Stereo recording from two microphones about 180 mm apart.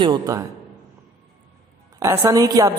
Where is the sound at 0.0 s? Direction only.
20° right (ahead or behind).